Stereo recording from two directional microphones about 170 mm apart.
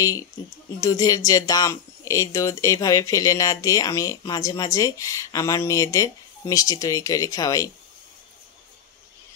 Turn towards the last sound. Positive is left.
turn(degrees=20)  # may be behind; listen again after turning